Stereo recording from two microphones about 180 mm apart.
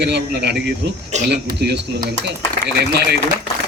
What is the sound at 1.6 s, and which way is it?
Speech, 70° right (ahead or behind).